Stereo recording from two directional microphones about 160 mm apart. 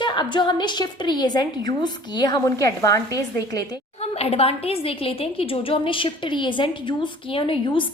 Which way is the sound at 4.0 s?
40° left (ahead or behind).